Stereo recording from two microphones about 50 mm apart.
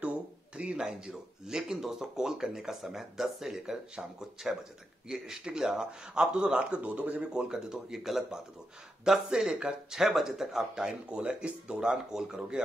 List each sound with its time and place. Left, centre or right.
0.0 s a sound: right
0.7 s speech: centre
11.9 s speech: centre